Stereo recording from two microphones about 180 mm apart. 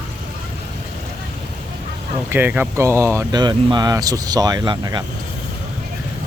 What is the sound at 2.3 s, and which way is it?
Speech, 10° right (ahead or behind).